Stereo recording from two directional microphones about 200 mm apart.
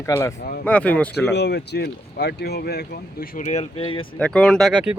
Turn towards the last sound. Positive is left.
turn(degrees=-5)  # may be behind; listen again after turning